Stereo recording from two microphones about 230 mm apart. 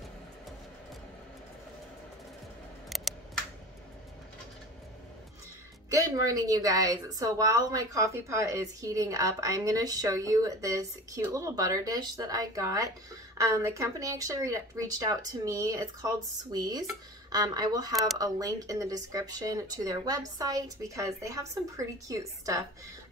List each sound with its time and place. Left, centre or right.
5.9 s a woman's voice: centre